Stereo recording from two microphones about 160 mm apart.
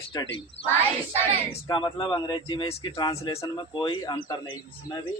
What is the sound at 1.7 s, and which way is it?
A man's voice, 30° left (ahead or behind).